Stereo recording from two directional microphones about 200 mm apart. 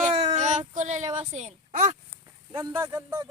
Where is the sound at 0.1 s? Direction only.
35° right (ahead or behind).